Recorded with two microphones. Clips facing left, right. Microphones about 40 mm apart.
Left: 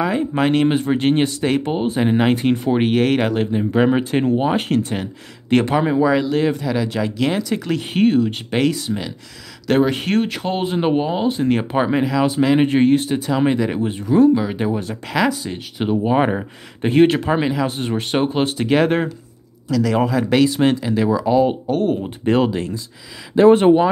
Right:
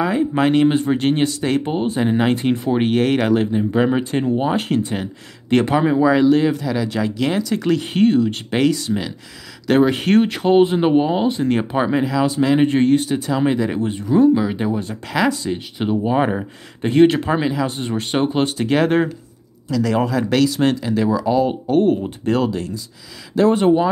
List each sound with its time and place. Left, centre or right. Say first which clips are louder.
0.0 s speech: right 1 dB; centre
18.6 s speech: even; centre
21.6 s speech: right 3 dB; centre
22.2 s speech: left 4 dB; left